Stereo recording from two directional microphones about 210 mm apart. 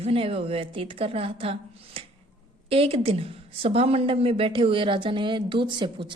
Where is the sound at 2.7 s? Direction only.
25° right (ahead or behind).